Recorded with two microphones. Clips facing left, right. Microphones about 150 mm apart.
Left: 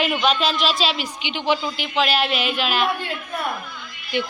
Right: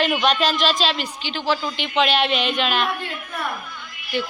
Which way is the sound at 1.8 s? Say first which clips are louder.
Right 1 dB; centre (ahead or behind).